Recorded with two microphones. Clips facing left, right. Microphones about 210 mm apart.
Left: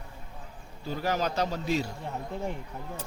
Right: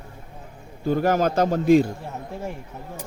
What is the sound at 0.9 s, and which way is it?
A man's voice, 50° right (ahead or behind).